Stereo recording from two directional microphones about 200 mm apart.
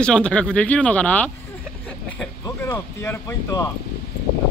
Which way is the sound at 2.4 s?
10° left (ahead or behind).